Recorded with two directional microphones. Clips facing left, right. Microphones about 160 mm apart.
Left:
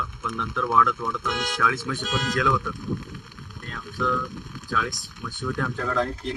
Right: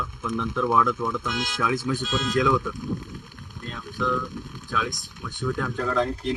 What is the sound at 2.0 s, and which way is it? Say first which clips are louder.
Speech: right 1 dB; 65° left (ahead or behind).